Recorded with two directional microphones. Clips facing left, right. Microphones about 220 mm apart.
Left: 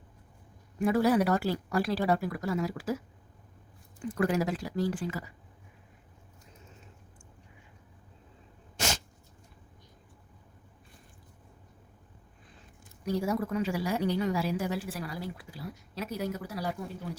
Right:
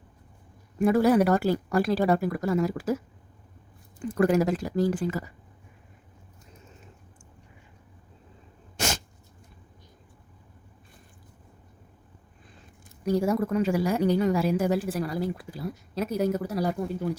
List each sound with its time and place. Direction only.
0.8 s a woman's voice: 50° right (ahead or behind)
4.2 s a woman's voice: 45° right (ahead or behind)
13.1 s a woman's voice: 45° right (ahead or behind)